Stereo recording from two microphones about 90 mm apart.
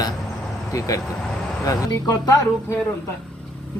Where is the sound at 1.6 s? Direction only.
40° left (ahead or behind).